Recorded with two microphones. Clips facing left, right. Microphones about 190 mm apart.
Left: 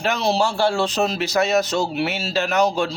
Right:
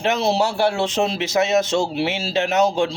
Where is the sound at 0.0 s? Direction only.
25° right (ahead or behind).